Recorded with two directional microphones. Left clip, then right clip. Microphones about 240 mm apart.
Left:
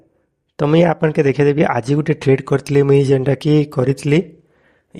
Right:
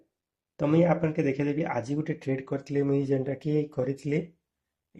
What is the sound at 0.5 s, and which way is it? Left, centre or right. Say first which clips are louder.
Speech: left 10 dB; left.